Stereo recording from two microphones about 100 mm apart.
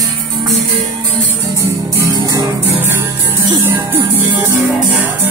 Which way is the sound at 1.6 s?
35° right (ahead or behind).